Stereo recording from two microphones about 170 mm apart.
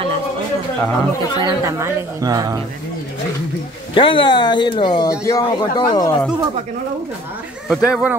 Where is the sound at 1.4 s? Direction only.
25° right (ahead or behind).